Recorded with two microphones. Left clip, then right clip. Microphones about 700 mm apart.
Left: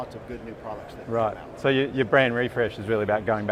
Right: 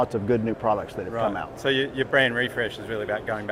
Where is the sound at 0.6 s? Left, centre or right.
Right.